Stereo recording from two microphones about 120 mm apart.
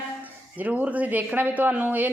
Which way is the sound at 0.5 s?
15° right (ahead or behind).